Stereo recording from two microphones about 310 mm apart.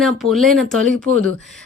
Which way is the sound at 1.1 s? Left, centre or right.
Right.